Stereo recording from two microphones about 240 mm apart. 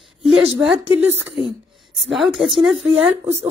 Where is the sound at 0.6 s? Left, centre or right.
Centre.